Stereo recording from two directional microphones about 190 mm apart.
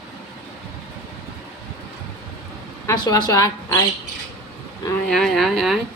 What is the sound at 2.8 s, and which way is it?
Speech, 20° left (ahead or behind).